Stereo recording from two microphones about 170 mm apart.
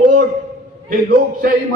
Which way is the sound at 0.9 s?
55° right (ahead or behind).